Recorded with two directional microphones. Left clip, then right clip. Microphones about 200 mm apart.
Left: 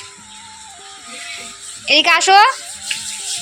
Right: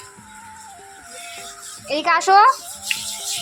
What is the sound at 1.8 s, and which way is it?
Speech, centre (ahead or behind).